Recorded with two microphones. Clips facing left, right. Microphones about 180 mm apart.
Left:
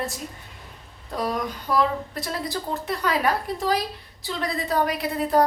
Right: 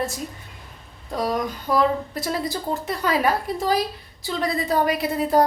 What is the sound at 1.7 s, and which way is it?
Speech, 20° right (ahead or behind).